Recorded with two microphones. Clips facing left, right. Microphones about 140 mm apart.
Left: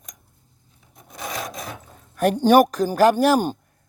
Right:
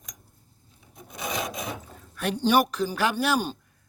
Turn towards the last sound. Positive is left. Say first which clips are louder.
# left 8 dB
turn(degrees=45)  # may be behind; listen again after turning